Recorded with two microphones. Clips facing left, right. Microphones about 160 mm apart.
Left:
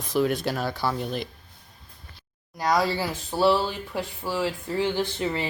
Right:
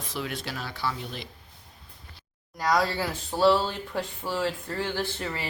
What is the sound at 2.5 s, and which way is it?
Speech, 10° left (ahead or behind).